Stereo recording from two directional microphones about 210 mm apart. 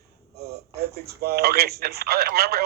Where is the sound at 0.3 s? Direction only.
50° right (ahead or behind).